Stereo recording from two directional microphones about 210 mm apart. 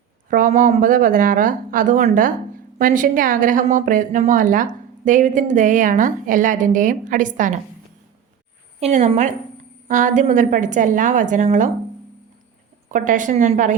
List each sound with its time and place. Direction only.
0.3 s a woman's voice: 40° right (ahead or behind)
8.8 s a woman's voice: 30° right (ahead or behind)
12.9 s a woman's voice: 35° right (ahead or behind)